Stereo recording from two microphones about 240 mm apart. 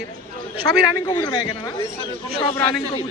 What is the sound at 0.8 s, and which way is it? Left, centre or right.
A man's voice, centre.